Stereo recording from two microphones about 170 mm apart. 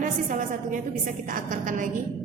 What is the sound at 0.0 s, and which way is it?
A woman's voice, 50° right (ahead or behind).